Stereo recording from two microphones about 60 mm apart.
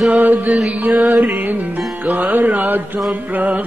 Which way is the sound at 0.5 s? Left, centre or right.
Centre.